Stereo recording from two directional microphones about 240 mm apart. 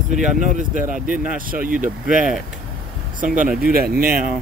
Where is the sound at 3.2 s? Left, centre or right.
Right.